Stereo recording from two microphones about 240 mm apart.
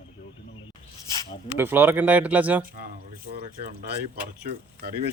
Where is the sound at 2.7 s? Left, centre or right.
Right.